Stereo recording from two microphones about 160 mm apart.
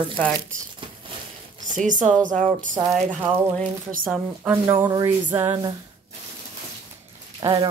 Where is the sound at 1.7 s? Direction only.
55° right (ahead or behind).